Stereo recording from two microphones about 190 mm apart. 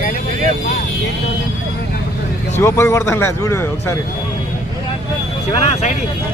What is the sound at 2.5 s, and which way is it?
Speech, 15° left (ahead or behind).